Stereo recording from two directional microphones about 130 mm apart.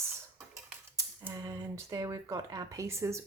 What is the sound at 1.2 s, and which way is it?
Speech, 25° right (ahead or behind).